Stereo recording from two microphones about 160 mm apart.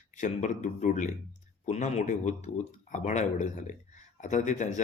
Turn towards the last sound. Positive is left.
turn(degrees=50)  # may be behind; listen again after turning